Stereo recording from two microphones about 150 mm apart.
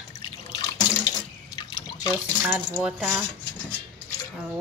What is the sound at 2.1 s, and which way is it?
Speech, 10° right (ahead or behind).